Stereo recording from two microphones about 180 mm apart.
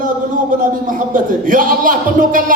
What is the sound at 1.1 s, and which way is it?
A man's voice, 50° right (ahead or behind).